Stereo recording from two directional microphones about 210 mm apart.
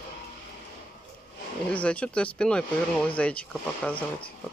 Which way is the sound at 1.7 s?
5° left (ahead or behind).